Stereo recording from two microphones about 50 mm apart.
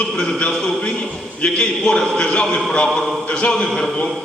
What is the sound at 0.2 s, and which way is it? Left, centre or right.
A man's voice, centre.